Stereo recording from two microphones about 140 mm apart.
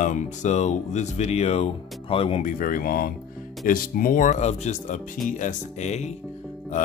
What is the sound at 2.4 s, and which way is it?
Speech, 90° left.